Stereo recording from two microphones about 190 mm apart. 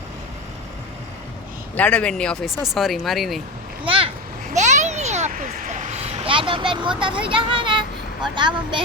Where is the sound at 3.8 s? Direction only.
25° right (ahead or behind).